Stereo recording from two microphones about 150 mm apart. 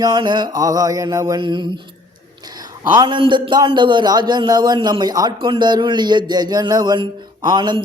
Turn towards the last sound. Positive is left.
turn(degrees=-30)  # may be behind; listen again after turning